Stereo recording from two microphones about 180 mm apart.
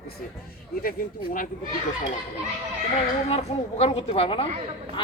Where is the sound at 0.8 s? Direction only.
50° left (ahead or behind).